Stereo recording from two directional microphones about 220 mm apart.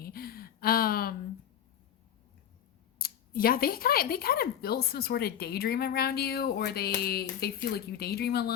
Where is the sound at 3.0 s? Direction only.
40° left (ahead or behind).